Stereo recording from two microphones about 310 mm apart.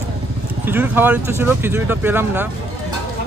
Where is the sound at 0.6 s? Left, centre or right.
Centre.